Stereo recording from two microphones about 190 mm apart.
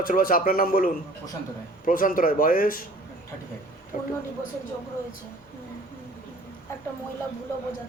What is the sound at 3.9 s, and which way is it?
Speech, 45° left (ahead or behind).